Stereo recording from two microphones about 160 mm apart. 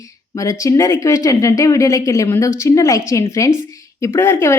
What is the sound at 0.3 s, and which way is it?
Speech, 20° left (ahead or behind).